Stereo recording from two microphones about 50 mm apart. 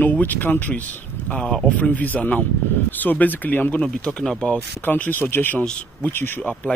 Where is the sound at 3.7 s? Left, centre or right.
Centre.